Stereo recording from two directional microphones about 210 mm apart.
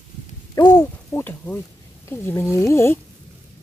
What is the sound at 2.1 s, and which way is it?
Speech, 10° left (ahead or behind).